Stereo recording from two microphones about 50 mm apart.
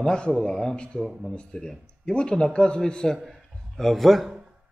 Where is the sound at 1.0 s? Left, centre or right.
Centre.